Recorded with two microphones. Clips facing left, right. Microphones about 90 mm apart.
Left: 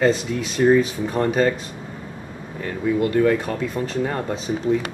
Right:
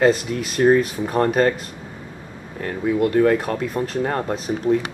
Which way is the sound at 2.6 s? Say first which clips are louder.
Right 1 dB; centre (ahead or behind).